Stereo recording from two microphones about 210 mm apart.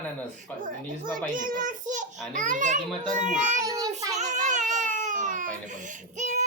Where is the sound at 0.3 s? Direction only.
40° right (ahead or behind).